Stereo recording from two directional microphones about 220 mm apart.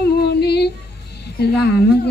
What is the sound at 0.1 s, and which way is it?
Female singing, 50° left (ahead or behind).